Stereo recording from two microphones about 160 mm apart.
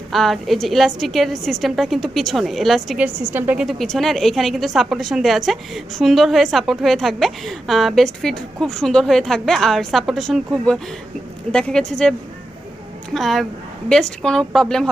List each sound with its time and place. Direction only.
0.1 s a woman's voice: centre (ahead or behind)
13.1 s a woman's voice: centre (ahead or behind)